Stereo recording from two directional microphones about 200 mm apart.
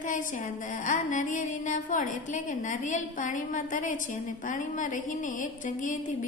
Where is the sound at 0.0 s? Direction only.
40° left (ahead or behind).